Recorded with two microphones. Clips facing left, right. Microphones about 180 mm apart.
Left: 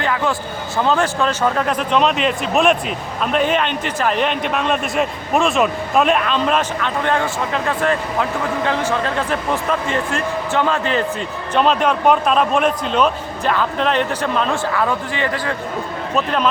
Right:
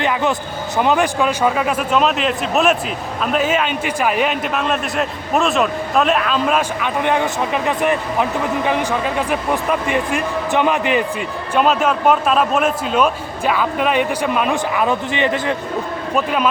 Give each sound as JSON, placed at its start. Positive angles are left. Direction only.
{"t": 0.0, "sound": "a man's voice", "side_deg": -20}
{"t": 16.1, "sound": "a man's voice", "side_deg": -5}